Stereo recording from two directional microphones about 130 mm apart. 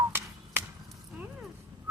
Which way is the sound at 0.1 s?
15° right (ahead or behind).